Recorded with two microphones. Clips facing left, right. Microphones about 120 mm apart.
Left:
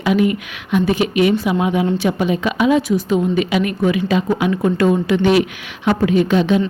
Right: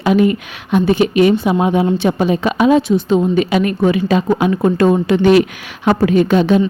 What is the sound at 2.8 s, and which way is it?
A woman's voice, 25° right (ahead or behind).